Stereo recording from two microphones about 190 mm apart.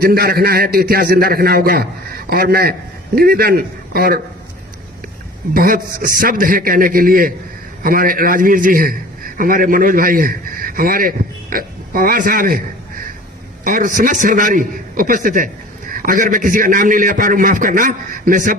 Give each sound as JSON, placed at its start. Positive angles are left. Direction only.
{"t": 0.0, "sound": "a man's voice", "side_deg": -50}
{"t": 5.5, "sound": "a man's voice", "side_deg": -50}